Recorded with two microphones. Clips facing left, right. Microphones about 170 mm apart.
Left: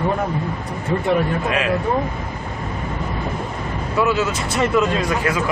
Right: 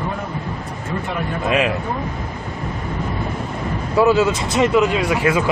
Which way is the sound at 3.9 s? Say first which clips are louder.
Right 5 dB; 30° right (ahead or behind).